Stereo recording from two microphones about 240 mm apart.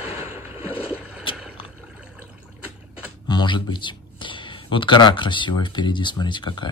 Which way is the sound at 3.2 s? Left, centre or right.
Centre.